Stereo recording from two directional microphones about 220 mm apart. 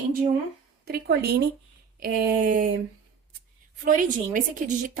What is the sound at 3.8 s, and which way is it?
Speech, 35° right (ahead or behind).